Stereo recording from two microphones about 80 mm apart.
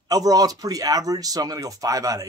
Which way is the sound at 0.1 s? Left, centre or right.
Right.